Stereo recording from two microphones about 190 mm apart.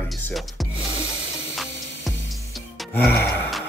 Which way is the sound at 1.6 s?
Centre (ahead or behind).